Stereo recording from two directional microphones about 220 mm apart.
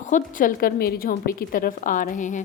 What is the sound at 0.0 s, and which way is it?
A woman's voice, 35° left (ahead or behind).